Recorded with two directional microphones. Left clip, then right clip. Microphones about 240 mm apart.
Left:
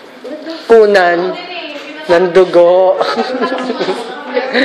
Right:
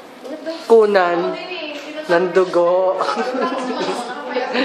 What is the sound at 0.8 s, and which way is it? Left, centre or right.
A woman's voice, centre.